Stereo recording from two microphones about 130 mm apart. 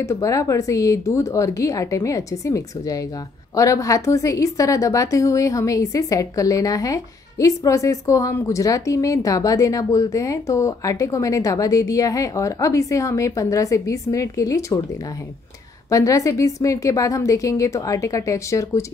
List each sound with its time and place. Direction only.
0.0 s a woman's voice: 25° left (ahead or behind)
15.9 s a woman's voice: 25° left (ahead or behind)